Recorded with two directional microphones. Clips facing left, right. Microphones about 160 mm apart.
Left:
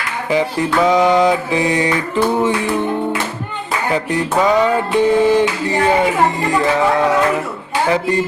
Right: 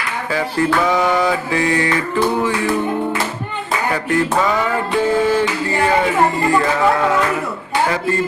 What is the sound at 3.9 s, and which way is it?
Mantra, 15° left (ahead or behind).